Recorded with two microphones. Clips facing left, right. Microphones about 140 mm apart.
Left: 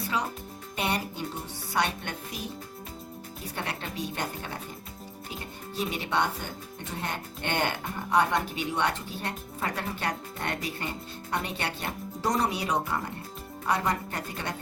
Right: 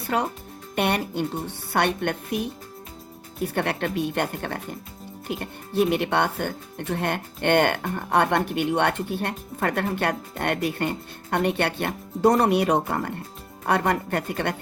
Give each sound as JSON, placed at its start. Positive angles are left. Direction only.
{"t": 0.1, "sound": "speech", "side_deg": -60}